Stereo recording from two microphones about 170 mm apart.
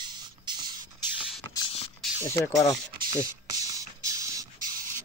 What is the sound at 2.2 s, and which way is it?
Speech, 20° left (ahead or behind).